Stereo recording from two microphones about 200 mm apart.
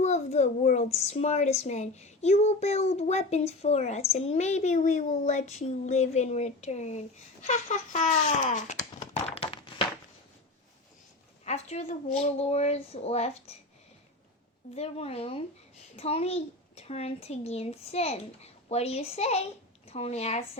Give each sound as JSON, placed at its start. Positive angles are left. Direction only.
{"t": 0.0, "sound": "speech", "side_deg": 35}
{"t": 9.0, "sound": "a sound", "side_deg": 30}
{"t": 11.4, "sound": "speech", "side_deg": 30}
{"t": 14.8, "sound": "speech", "side_deg": 30}